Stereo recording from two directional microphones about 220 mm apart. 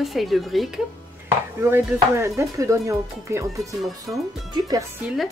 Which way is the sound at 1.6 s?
10° right (ahead or behind).